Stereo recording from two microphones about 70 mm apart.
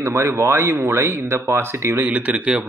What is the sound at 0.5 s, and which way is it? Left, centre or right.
Speech, right.